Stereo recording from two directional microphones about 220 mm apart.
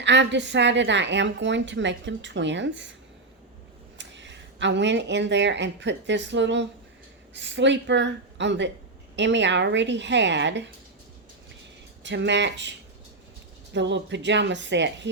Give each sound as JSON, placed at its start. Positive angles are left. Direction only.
{"t": 0.0, "sound": "a woman's voice", "side_deg": -55}
{"t": 3.9, "sound": "a woman's voice", "side_deg": -55}
{"t": 12.0, "sound": "a woman's voice", "side_deg": -55}
{"t": 13.7, "sound": "a woman's voice", "side_deg": -55}